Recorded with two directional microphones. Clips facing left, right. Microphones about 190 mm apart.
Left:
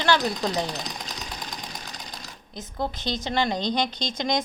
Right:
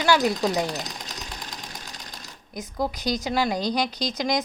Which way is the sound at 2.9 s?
25° left (ahead or behind).